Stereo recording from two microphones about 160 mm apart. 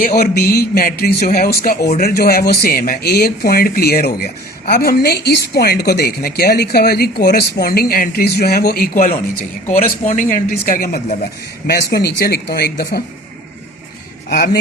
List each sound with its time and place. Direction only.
0.0 s speech: 70° left (ahead or behind)
9.6 s speech: 55° left (ahead or behind)
11.6 s speech: 80° left
14.3 s speech: 70° left (ahead or behind)